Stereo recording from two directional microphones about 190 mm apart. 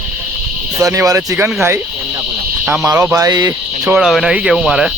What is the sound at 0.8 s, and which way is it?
Speech, 15° right (ahead or behind).